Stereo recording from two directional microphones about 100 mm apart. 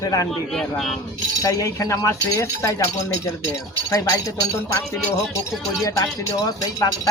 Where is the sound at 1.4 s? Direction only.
35° left (ahead or behind).